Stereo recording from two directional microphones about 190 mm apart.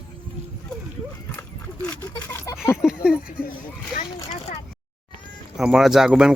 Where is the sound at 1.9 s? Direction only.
10° left (ahead or behind).